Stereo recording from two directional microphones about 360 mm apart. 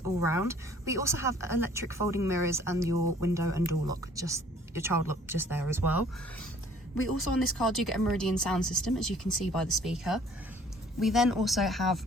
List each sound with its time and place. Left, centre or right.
0.3 s speech: centre
7.3 s speech: centre